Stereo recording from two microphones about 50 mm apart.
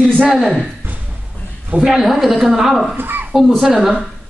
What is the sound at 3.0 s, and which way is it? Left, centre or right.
Speech, right.